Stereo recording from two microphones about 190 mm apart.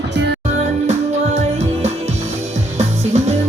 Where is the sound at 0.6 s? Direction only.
35° right (ahead or behind).